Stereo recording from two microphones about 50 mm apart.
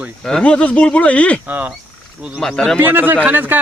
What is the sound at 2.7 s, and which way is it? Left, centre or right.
Speech, right.